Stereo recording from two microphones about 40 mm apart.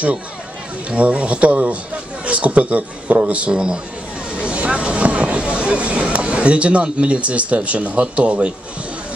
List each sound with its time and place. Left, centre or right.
0.8 s speech: right